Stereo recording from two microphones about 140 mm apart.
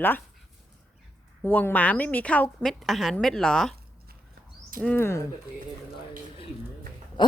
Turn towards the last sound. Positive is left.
turn(degrees=35)  # may be behind; listen again after turning